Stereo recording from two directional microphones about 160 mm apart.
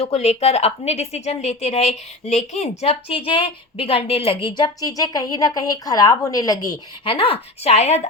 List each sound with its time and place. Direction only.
0.0 s a woman's voice: 40° left (ahead or behind)